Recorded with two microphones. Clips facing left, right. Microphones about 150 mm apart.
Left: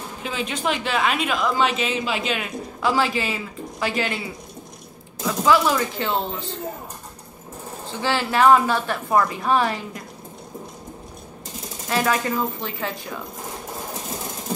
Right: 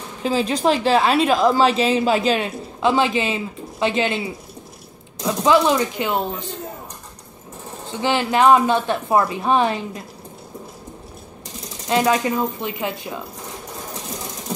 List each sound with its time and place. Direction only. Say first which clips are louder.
0.2 s a woman's voice: right 8 dB; 35° right (ahead or behind)
5.2 s speech: right 2 dB; 20° right (ahead or behind)
7.9 s a woman's voice: right 3 dB; 20° right (ahead or behind)
11.9 s speech: right 4 dB; 20° right (ahead or behind)